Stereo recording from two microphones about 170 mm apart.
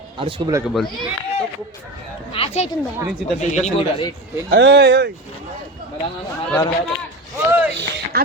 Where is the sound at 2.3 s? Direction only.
35° left (ahead or behind).